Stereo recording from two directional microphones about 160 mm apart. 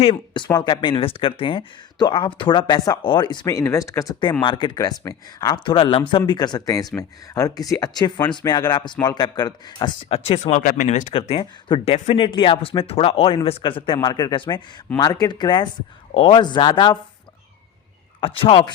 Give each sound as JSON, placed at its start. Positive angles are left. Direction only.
{"t": 0.0, "sound": "speech", "side_deg": 30}
{"t": 18.2, "sound": "speech", "side_deg": 35}